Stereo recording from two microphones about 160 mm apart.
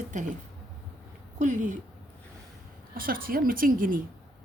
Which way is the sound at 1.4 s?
55° right (ahead or behind).